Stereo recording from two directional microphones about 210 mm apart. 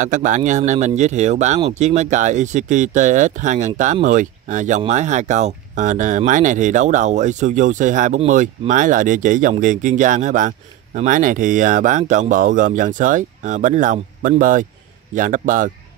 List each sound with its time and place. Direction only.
0.0 s speech: 35° right (ahead or behind)